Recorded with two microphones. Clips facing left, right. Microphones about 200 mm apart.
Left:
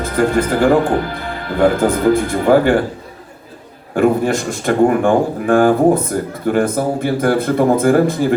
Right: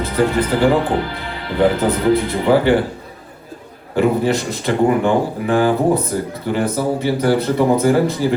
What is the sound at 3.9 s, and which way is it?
Speech, 50° left (ahead or behind).